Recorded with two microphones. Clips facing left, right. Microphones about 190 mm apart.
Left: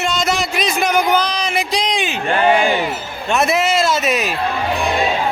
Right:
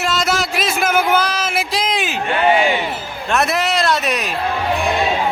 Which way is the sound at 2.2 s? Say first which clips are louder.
Left 1 dB; 40° left (ahead or behind).